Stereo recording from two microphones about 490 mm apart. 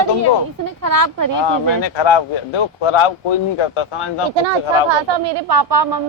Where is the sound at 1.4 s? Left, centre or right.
Left.